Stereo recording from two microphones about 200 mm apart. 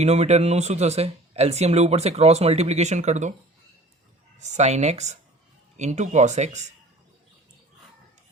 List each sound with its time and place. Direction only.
0.0 s speech: 35° right (ahead or behind)
4.4 s speech: 35° right (ahead or behind)